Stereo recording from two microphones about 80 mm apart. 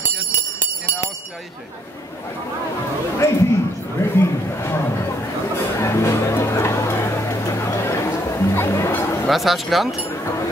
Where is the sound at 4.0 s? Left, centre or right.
Left.